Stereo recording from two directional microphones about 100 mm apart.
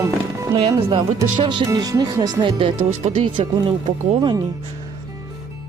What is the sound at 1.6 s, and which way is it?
Speech, 35° right (ahead or behind).